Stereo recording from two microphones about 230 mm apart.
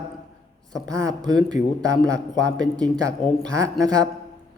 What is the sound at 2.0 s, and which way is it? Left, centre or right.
Speech, centre.